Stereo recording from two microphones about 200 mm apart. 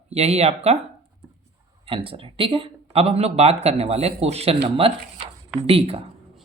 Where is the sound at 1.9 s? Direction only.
25° right (ahead or behind).